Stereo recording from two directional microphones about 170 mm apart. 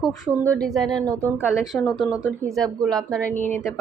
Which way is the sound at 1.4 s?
5° right (ahead or behind).